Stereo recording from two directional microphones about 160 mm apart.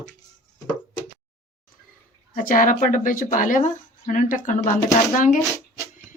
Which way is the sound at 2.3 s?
55° left (ahead or behind).